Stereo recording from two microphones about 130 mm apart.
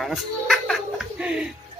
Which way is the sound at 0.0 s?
Centre (ahead or behind).